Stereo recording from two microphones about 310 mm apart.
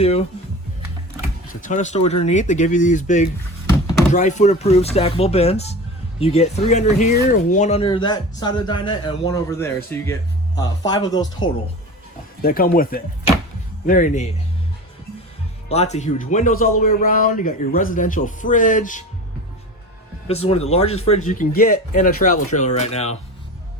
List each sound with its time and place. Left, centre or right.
0.0 s speech: centre
1.6 s speech: left
12.4 s speech: left
15.7 s speech: left
20.2 s speech: centre